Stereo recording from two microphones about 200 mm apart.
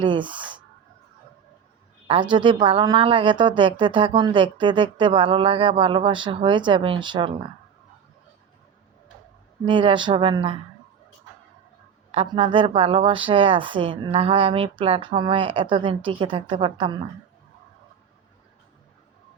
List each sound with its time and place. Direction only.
0.0 s speech: 25° right (ahead or behind)
2.3 s speech: 25° right (ahead or behind)
9.6 s speech: 25° right (ahead or behind)
12.1 s speech: 25° right (ahead or behind)